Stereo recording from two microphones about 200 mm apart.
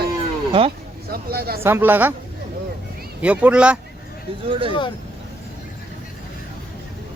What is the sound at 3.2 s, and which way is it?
Speech, 5° right (ahead or behind).